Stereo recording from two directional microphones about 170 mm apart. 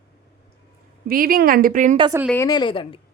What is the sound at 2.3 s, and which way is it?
Speech, 20° left (ahead or behind).